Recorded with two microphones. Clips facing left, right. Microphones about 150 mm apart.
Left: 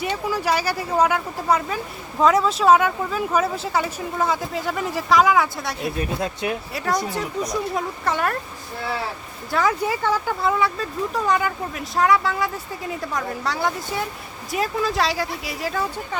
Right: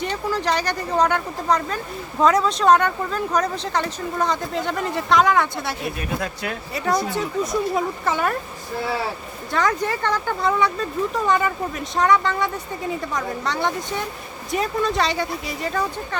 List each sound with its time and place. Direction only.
0.0 s speech: 10° left (ahead or behind)
6.1 s speech: 25° left (ahead or behind)
6.7 s speech: centre (ahead or behind)
9.5 s speech: 5° left (ahead or behind)